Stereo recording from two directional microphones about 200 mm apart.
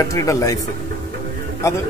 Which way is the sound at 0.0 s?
15° left (ahead or behind).